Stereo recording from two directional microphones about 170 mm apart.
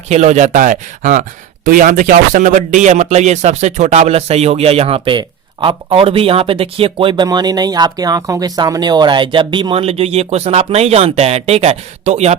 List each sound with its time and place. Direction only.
0.1 s speech: 45° right (ahead or behind)